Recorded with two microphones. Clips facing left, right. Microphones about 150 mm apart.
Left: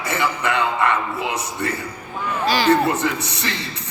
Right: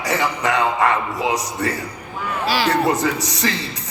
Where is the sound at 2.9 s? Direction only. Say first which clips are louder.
Right 2 dB; 35° right (ahead or behind).